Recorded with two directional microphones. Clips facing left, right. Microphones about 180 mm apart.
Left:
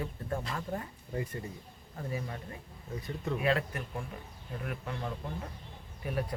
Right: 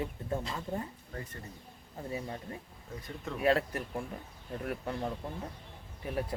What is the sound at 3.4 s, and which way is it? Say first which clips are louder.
Speech: right 4 dB; 40° right (ahead or behind).